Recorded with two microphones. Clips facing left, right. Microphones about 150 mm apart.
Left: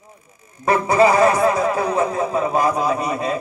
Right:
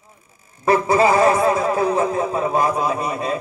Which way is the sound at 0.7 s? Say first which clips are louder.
Even; 30° right (ahead or behind).